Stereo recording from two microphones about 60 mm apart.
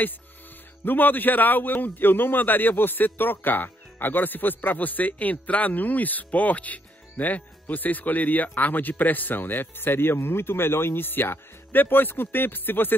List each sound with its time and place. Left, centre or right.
0.8 s a man's voice: left